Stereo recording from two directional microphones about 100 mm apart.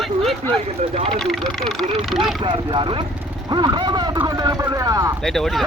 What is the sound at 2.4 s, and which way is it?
Speech, 55° right (ahead or behind).